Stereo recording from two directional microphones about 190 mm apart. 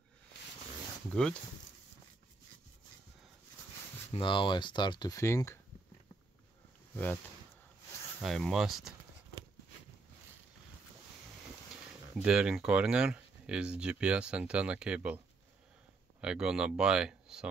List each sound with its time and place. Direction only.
1.1 s speech: 5° left (ahead or behind)
4.1 s speech: 25° left (ahead or behind)
8.2 s speech: centre (ahead or behind)
12.2 s speech: 5° right (ahead or behind)
16.2 s speech: 5° right (ahead or behind)